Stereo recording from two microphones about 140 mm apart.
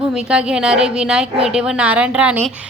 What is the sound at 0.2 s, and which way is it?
A woman's voice, 5° right (ahead or behind).